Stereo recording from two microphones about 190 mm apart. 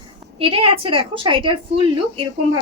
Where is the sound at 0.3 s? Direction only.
30° right (ahead or behind).